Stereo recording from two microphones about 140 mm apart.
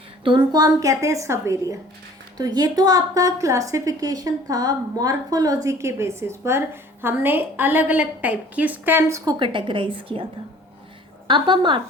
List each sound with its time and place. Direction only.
0.3 s a woman's voice: 30° right (ahead or behind)
9.4 s speech: 35° right (ahead or behind)
11.3 s speech: 35° right (ahead or behind)